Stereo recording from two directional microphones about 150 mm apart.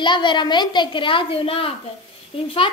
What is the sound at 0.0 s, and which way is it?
A child's voice, 30° left (ahead or behind).